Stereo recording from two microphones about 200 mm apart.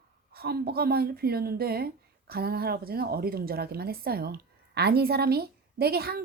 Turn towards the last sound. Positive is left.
turn(degrees=-50)  # may be behind; listen again after turning